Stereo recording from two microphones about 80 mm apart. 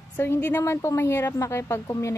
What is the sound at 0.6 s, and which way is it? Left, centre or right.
Speech, left.